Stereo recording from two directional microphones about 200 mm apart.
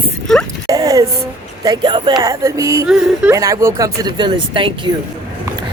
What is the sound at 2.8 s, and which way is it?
Speech, 5° right (ahead or behind).